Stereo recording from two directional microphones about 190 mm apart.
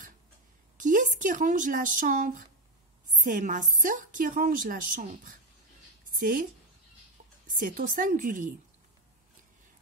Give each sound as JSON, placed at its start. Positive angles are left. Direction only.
{"t": 0.7, "sound": "a woman's voice", "side_deg": -45}
{"t": 7.5, "sound": "a woman's voice", "side_deg": -45}